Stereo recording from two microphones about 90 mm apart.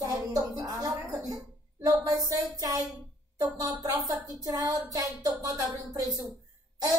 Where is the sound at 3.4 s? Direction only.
45° right (ahead or behind).